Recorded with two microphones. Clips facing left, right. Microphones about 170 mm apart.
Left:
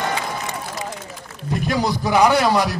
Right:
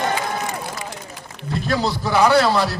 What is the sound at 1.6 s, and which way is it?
A man's voice, 15° left (ahead or behind).